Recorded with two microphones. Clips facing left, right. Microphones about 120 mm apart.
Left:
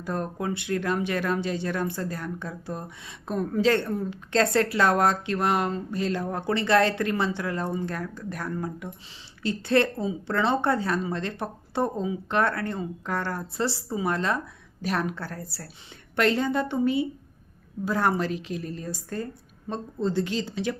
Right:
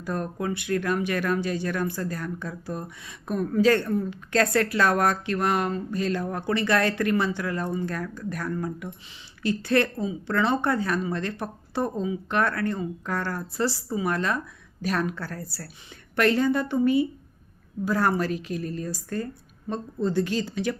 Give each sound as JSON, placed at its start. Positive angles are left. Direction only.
{"t": 0.0, "sound": "speech", "side_deg": 25}